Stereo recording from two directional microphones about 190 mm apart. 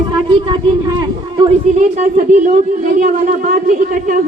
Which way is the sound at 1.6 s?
40° right (ahead or behind).